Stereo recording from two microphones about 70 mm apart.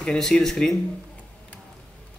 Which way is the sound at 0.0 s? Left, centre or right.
Centre.